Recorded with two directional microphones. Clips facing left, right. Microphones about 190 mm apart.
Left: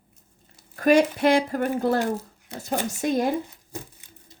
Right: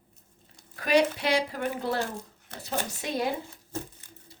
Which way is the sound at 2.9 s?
45° left (ahead or behind).